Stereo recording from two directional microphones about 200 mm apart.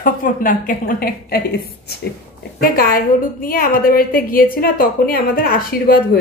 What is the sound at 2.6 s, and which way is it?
Speech, 45° left (ahead or behind).